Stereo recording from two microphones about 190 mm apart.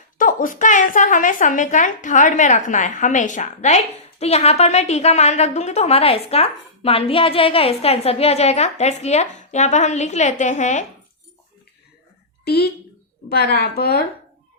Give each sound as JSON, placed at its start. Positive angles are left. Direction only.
{"t": 0.2, "sound": "a woman's voice", "side_deg": 45}
{"t": 12.5, "sound": "speech", "side_deg": 55}